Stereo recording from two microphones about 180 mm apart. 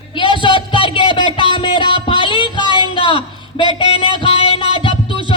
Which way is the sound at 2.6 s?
25° right (ahead or behind).